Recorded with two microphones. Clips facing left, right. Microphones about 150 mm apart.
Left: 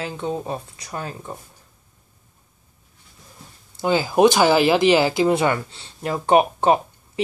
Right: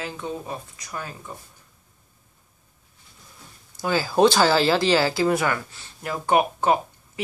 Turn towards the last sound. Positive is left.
turn(degrees=25)  # may be behind; listen again after turning